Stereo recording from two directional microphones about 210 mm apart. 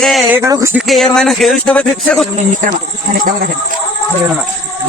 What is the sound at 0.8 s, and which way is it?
Speech, centre (ahead or behind).